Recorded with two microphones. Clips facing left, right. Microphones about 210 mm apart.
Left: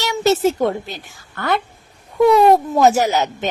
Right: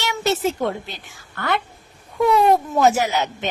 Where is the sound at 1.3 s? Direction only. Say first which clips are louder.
Left 3 dB; 40° left (ahead or behind).